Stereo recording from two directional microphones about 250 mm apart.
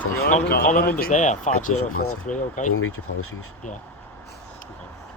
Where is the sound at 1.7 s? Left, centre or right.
Left.